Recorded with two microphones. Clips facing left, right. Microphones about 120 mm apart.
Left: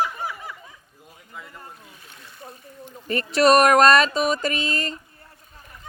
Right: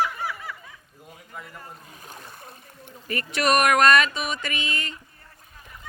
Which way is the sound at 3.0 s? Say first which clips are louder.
Left 7 dB; 30° left (ahead or behind).